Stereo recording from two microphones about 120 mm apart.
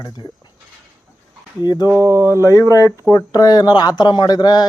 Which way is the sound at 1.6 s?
35° left (ahead or behind).